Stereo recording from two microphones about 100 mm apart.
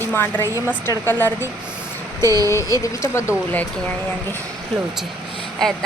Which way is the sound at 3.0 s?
30° left (ahead or behind).